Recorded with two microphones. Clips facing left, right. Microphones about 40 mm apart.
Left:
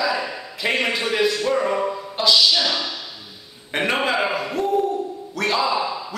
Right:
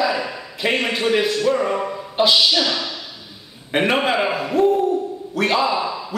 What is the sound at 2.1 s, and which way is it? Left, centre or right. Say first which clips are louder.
Speech: right 3 dB; right.